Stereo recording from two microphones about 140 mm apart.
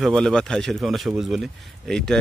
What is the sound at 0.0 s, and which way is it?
Speech, 5° left (ahead or behind).